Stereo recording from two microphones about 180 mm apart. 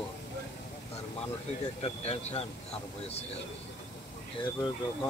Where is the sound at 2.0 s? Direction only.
35° left (ahead or behind).